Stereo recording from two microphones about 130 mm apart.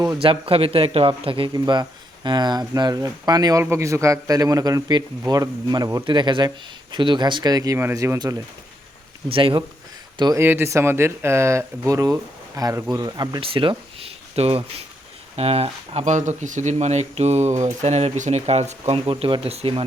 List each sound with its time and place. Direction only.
0.2 s a man's voice: 45° right (ahead or behind)
7.8 s a man's voice: 20° right (ahead or behind)
9.3 s speech: 40° right (ahead or behind)
10.3 s a man's voice: 20° right (ahead or behind)
13.4 s speech: 45° right (ahead or behind)
19.0 s speech: 40° right (ahead or behind)